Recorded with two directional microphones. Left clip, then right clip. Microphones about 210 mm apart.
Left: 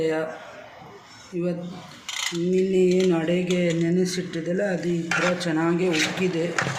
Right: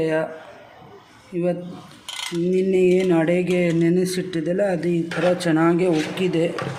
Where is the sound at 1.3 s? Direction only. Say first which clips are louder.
Right 4 dB; 55° right (ahead or behind).